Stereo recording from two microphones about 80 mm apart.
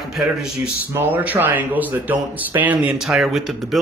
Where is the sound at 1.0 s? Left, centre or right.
Right.